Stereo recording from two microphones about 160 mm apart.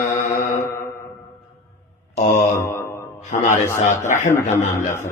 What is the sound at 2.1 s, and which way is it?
Mantra, 45° left (ahead or behind).